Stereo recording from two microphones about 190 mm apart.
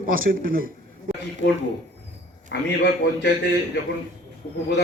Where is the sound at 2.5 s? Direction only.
60° left (ahead or behind).